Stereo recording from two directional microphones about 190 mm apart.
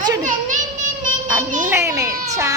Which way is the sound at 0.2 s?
40° right (ahead or behind).